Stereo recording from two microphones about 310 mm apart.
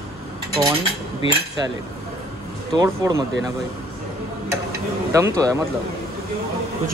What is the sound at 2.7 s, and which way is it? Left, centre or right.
Speech, centre.